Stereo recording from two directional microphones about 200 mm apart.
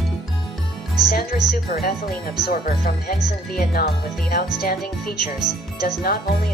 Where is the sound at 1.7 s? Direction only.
45° left (ahead or behind).